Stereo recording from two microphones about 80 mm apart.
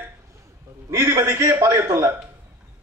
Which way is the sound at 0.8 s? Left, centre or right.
Right.